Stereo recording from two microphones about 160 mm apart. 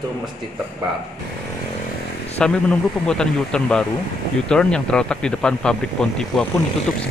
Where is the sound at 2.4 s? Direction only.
5° left (ahead or behind).